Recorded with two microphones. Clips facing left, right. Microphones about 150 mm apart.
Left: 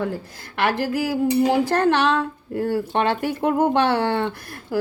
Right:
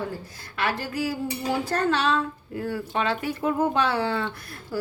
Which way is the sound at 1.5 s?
75° left (ahead or behind).